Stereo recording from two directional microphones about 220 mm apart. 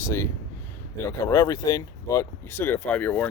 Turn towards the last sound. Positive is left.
turn(degrees=10)  # may be behind; listen again after turning